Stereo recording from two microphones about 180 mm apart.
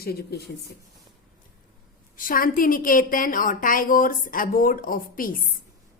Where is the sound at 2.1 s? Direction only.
50° left (ahead or behind).